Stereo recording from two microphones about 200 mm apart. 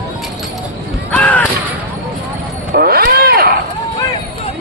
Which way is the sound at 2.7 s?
50° right (ahead or behind).